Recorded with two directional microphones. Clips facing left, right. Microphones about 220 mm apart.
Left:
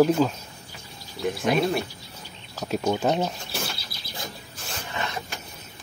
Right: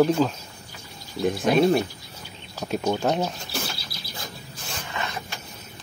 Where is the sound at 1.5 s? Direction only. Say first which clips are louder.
Right 3 dB; 35° right (ahead or behind).